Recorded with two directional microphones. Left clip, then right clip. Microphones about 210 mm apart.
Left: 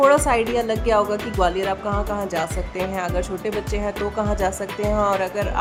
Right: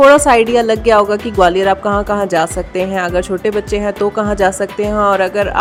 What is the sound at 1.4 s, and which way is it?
Music, 30° right (ahead or behind).